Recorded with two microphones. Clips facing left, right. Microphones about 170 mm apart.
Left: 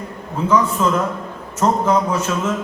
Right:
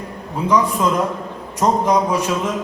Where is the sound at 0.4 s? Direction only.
15° right (ahead or behind).